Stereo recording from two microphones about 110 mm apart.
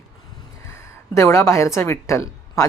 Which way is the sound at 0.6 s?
25° left (ahead or behind).